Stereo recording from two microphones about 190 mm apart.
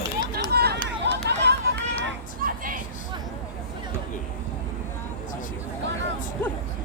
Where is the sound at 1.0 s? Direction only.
65° right (ahead or behind).